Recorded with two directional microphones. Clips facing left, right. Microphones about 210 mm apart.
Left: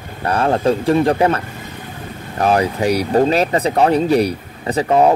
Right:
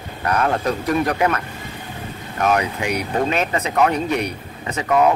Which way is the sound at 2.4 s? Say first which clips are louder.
Left 4 dB; 35° left (ahead or behind).